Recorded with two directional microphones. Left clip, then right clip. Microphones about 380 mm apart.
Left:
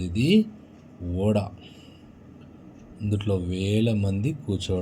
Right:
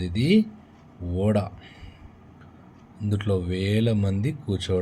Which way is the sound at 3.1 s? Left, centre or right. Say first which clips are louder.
Right 1 dB; centre.